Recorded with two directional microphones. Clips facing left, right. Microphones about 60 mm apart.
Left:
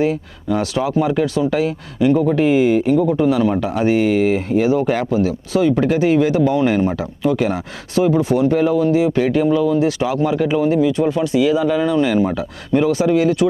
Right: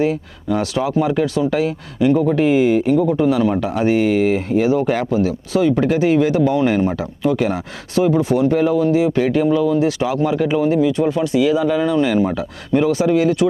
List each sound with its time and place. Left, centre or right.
0.5 s speech: left